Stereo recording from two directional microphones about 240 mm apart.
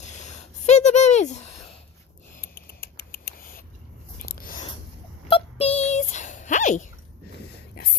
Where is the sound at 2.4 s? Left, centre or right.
Left.